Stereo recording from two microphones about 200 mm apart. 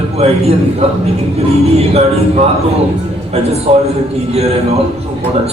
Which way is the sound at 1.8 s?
30° right (ahead or behind).